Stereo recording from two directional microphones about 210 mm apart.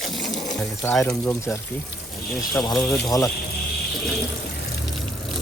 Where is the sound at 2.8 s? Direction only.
Centre (ahead or behind).